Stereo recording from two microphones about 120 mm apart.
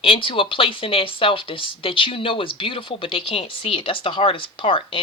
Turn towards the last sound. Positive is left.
turn(degrees=45)  # may be behind; listen again after turning